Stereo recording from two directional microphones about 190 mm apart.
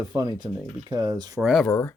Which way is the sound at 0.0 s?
20° right (ahead or behind).